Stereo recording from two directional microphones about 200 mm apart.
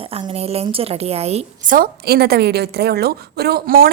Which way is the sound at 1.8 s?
50° right (ahead or behind).